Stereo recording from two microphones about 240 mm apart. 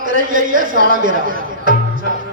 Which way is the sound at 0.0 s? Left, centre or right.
Right.